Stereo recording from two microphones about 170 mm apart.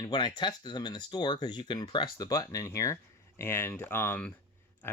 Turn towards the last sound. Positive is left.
turn(degrees=10)  # may be behind; listen again after turning